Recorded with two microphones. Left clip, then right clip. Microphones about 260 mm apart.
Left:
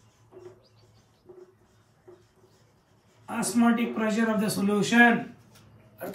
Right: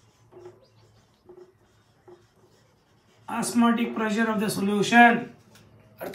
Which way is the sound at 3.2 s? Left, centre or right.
Centre.